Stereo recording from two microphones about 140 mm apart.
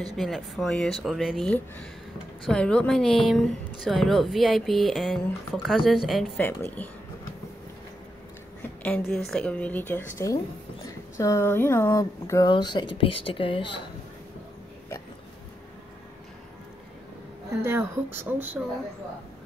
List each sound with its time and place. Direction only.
0.1 s speech: centre (ahead or behind)
6.3 s a woman's voice: 15° left (ahead or behind)
8.8 s a woman's voice: 5° left (ahead or behind); by 13.7 s 35° left (ahead or behind)
17.5 s speech: 15° right (ahead or behind)